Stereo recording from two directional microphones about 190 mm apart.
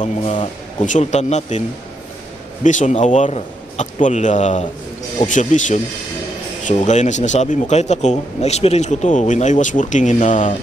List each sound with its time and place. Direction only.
0.8 s a man's voice: 40° left (ahead or behind)
2.6 s a man's voice: 40° left (ahead or behind)